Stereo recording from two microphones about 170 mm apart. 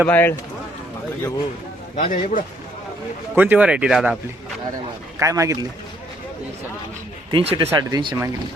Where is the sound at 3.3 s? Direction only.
10° right (ahead or behind).